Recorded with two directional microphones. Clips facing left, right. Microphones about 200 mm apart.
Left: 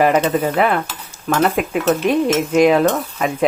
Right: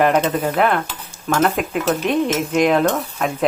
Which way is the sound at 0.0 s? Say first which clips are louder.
Left 2 dB; 5° left (ahead or behind).